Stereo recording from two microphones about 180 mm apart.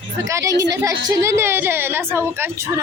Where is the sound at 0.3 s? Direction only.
15° right (ahead or behind).